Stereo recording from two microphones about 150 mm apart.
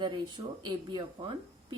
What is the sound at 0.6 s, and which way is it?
Speech, 30° right (ahead or behind).